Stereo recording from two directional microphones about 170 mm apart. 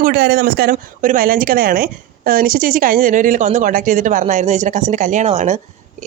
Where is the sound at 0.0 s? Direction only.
65° right (ahead or behind).